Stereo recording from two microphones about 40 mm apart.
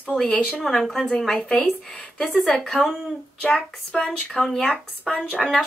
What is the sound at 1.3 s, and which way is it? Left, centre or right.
A woman's voice, centre.